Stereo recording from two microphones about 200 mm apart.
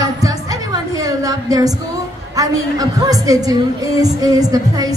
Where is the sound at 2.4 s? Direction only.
20° right (ahead or behind).